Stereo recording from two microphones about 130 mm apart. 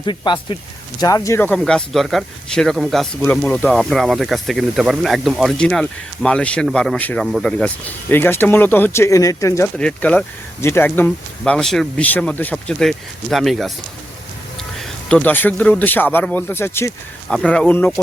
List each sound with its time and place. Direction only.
0.0 s speech: 35° left (ahead or behind); by 7.7 s 5° left (ahead or behind)
8.1 s speech: 15° left (ahead or behind)
9.7 s speech: 10° left (ahead or behind)
14.8 s speech: 10° left (ahead or behind)
17.2 s speech: 5° left (ahead or behind)